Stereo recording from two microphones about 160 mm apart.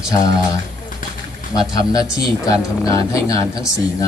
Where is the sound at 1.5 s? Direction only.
25° left (ahead or behind).